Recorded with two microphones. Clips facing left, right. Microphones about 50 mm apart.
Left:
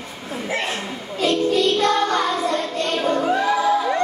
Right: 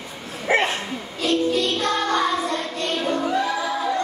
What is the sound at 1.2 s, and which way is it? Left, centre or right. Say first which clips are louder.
Music: left 3 dB; left.